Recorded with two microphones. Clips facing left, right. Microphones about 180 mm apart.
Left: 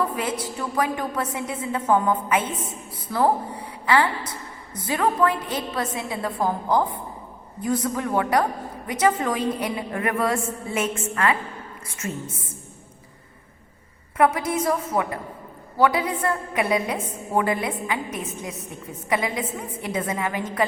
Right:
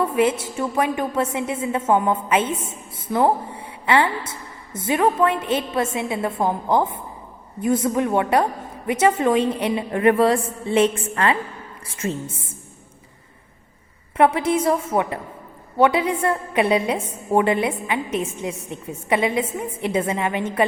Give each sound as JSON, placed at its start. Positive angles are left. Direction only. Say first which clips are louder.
{"t": 0.0, "sound": "a woman's voice", "louder": "right 6 dB", "side_deg": -25}
{"t": 14.2, "sound": "a woman's voice", "louder": "right 3 dB", "side_deg": -30}